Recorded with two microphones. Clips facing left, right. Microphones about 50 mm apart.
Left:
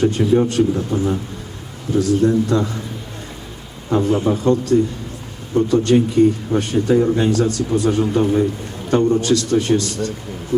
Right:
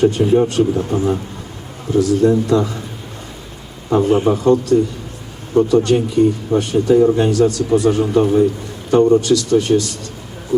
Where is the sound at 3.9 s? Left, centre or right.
Right.